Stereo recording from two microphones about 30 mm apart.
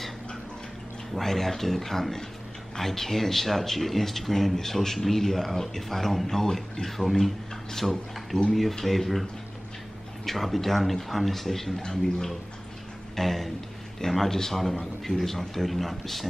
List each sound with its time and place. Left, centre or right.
1.1 s a man's voice: centre
8.7 s speech: centre
13.2 s a man's voice: centre